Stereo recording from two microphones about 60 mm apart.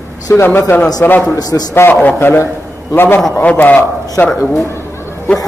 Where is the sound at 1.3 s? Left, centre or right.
Left.